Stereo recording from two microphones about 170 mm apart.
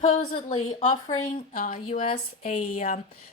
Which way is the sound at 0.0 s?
45° left (ahead or behind).